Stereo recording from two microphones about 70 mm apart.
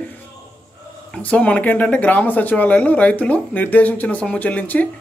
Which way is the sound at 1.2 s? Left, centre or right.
Centre.